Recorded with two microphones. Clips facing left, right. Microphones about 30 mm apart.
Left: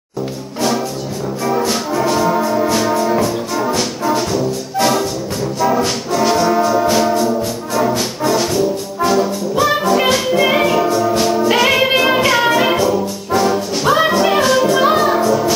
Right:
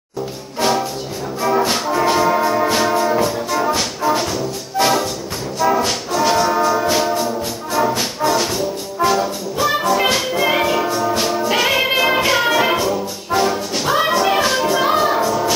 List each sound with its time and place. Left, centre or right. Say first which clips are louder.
0.6 s music: even; centre
1.4 s brass instrument: right 1 dB; centre
3.2 s music: left 1 dB; centre
5.6 s brass instrument: even; centre
14.4 s music: left 4 dB; centre